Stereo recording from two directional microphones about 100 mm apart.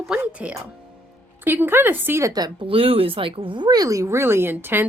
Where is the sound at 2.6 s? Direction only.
70° right (ahead or behind).